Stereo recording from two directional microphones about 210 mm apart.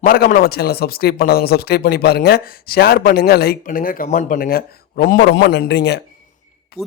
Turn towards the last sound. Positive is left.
turn(degrees=55)  # may be behind; listen again after turning